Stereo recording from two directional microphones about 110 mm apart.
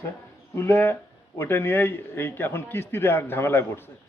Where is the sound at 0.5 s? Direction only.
20° left (ahead or behind).